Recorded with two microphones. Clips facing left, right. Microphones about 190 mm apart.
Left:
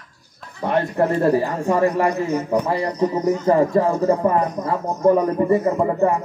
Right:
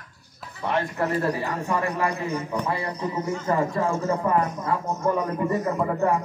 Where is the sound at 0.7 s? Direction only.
30° left (ahead or behind).